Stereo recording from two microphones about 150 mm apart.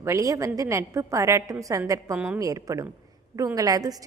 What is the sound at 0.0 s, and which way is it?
A woman's voice, 20° right (ahead or behind).